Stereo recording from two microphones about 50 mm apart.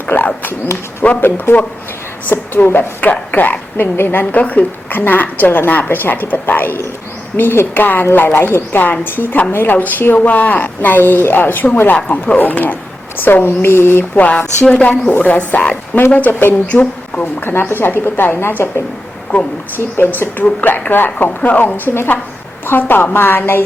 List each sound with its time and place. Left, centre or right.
0.1 s speech: left
1.0 s a woman's voice: left
1.5 s a woman's voice: left
10.2 s a woman's voice: left
12.1 s a woman's voice: left
12.4 s a woman's voice: left
14.2 s a woman's voice: left
16.6 s a woman's voice: left
17.4 s speech: left
19.3 s a woman's voice: left
19.7 s a woman's voice: left